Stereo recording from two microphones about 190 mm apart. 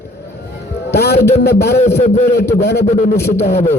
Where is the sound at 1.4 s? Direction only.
60° left (ahead or behind).